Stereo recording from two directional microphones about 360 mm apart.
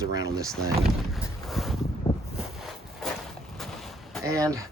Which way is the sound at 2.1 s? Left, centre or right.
Centre.